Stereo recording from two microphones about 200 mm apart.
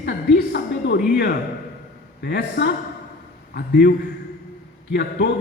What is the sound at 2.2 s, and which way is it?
A woman's voice, 55° left (ahead or behind).